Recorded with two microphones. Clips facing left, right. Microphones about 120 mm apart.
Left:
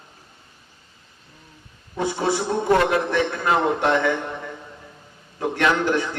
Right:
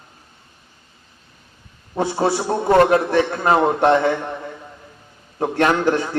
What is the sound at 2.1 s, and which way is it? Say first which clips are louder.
A man's voice: right 3 dB; 35° right (ahead or behind).